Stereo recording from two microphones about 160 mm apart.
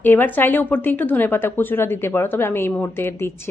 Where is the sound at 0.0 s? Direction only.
10° left (ahead or behind).